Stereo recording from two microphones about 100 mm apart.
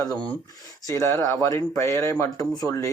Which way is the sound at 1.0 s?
25° left (ahead or behind).